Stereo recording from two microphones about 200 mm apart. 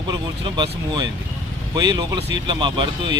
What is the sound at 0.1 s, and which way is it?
Speech, 20° right (ahead or behind).